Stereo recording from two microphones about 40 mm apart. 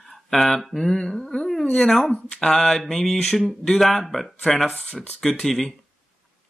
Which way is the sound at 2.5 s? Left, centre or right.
Centre.